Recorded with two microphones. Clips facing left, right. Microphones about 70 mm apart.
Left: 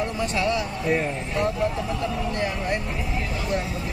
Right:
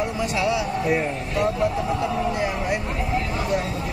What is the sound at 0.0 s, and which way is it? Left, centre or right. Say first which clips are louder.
Speech: right 1 dB; centre.